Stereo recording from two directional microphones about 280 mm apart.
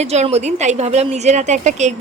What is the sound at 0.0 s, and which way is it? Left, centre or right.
Speech, right.